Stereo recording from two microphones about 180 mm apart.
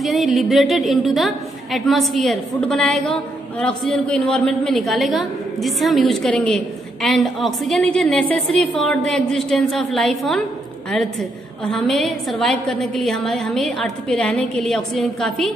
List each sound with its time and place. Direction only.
0.0 s a woman's voice: centre (ahead or behind)